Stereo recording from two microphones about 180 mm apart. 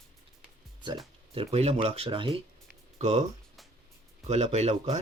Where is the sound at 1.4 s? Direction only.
35° right (ahead or behind).